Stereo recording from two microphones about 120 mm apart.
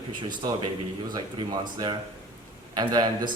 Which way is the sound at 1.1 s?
35° right (ahead or behind).